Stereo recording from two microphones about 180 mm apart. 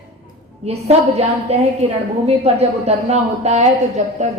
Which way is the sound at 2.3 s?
35° right (ahead or behind).